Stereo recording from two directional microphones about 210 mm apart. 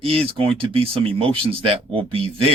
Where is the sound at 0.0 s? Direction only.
25° right (ahead or behind).